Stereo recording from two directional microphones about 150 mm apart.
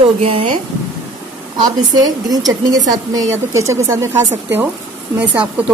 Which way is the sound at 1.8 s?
25° right (ahead or behind).